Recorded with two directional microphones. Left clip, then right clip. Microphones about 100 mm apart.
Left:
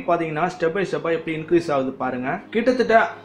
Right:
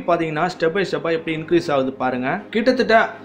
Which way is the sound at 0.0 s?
30° right (ahead or behind).